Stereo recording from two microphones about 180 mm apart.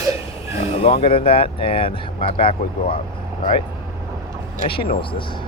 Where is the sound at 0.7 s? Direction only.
35° left (ahead or behind).